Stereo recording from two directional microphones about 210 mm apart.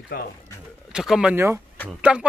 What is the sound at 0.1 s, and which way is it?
Speech, 45° left (ahead or behind).